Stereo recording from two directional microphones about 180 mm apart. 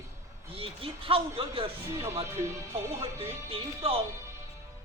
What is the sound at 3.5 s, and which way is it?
Speech, 30° right (ahead or behind).